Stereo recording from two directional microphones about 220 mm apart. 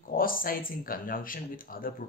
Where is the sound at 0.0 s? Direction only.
40° left (ahead or behind).